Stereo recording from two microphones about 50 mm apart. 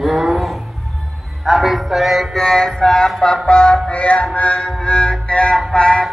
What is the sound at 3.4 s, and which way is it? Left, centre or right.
Music, centre.